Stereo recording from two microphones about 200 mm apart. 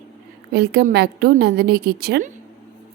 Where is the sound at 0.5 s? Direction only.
55° right (ahead or behind).